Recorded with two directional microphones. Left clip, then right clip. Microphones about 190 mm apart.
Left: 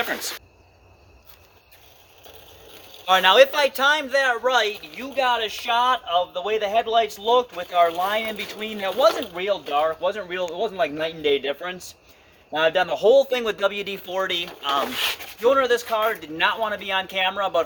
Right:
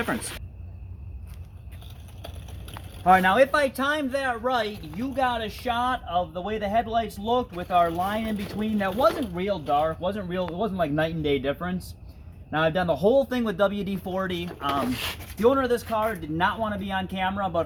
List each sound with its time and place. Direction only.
3.1 s speech: 60° left (ahead or behind); by 17.3 s 20° left (ahead or behind)